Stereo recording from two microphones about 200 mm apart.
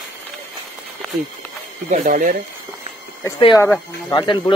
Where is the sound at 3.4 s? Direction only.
20° left (ahead or behind).